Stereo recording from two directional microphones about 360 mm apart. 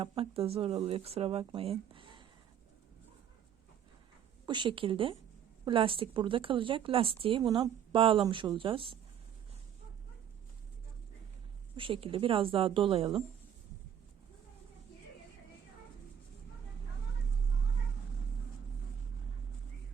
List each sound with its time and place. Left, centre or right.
0.0 s a woman's voice: centre
4.4 s a woman's voice: centre
11.8 s a woman's voice: centre